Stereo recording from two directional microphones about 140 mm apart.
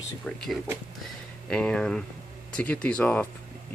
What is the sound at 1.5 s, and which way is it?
Speech, 5° left (ahead or behind).